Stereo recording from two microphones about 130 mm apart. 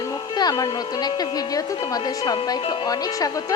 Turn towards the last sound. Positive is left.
turn(degrees=30)  # may be behind; listen again after turning